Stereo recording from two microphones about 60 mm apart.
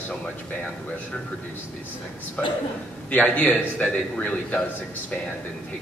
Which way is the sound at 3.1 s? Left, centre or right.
Left.